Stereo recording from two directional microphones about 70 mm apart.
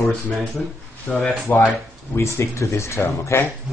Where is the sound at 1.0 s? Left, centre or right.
Left.